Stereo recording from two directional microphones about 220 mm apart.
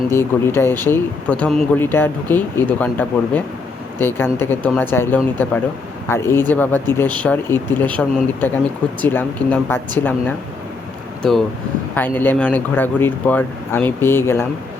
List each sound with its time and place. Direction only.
0.1 s speech: 10° left (ahead or behind)